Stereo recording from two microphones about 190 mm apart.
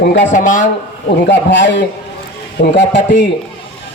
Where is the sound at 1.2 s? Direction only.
70° left (ahead or behind).